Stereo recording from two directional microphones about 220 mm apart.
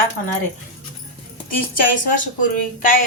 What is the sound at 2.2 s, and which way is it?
Speech, 35° left (ahead or behind).